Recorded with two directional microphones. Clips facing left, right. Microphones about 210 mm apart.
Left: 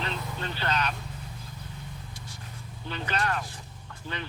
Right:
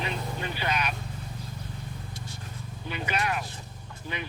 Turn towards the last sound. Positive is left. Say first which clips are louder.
# right 1 dB
turn(degrees=-10)  # may be behind; listen again after turning